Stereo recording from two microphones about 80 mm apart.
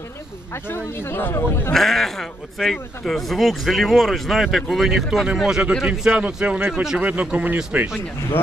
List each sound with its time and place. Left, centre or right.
0.7 s speech: left
1.7 s speech: centre